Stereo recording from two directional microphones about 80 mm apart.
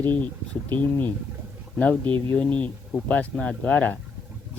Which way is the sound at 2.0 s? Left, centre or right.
Right.